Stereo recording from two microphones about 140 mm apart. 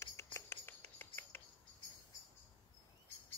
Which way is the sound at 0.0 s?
20° left (ahead or behind).